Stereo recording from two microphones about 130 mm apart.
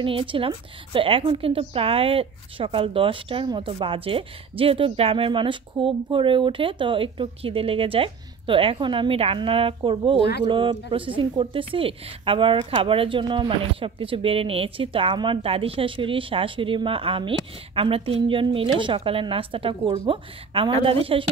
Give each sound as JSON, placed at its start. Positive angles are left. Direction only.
{"t": 0.0, "sound": "a woman's voice", "side_deg": -40}